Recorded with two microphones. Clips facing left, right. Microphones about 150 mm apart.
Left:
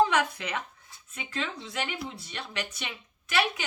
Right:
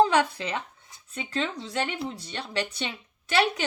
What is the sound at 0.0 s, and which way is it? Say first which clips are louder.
A woman's voice: right 3 dB; 30° right (ahead or behind).